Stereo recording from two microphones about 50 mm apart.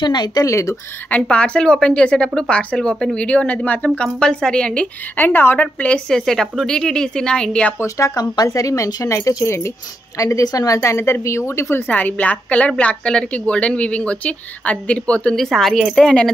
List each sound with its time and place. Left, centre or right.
0.5 s speech: left
1.3 s speech: left
5.1 s speech: left
5.6 s speech: left
6.0 s speech: centre
8.5 s speech: left
10.1 s speech: left
11.0 s speech: left
11.2 s speech: left
11.9 s speech: left
15.3 s speech: centre